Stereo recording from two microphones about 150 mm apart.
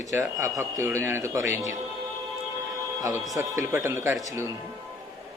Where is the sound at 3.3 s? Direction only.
55° left (ahead or behind).